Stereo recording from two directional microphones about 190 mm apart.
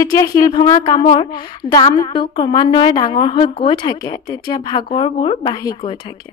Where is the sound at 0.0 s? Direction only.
20° left (ahead or behind).